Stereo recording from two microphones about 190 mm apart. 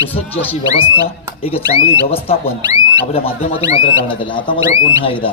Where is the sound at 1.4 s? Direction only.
30° left (ahead or behind).